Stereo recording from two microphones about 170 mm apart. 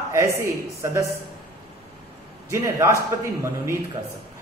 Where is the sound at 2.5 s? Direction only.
15° right (ahead or behind).